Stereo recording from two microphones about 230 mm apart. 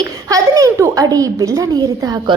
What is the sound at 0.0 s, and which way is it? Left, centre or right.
A child's voice, centre.